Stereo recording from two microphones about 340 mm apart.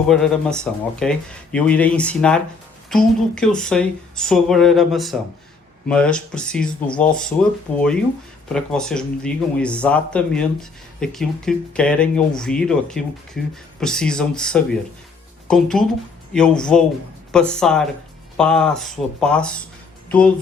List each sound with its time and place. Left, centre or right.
0.1 s speech: centre